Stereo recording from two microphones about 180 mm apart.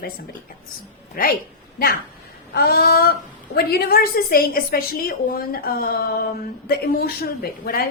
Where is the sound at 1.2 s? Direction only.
55° left (ahead or behind).